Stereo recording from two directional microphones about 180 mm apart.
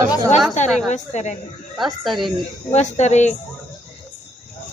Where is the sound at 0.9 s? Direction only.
40° left (ahead or behind).